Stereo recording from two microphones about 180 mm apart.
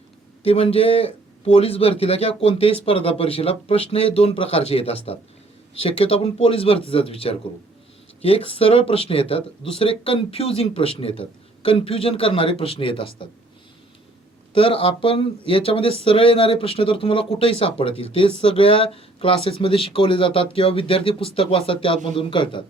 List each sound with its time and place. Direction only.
0.4 s speech: 35° left (ahead or behind)
14.5 s speech: 30° left (ahead or behind)